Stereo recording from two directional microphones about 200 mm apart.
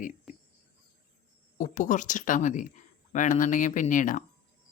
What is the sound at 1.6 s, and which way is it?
Speech, 40° left (ahead or behind).